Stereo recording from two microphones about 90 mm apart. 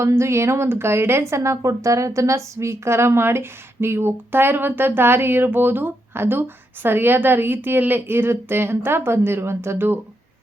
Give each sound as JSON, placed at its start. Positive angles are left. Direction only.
{"t": 0.0, "sound": "a woman's voice", "side_deg": -30}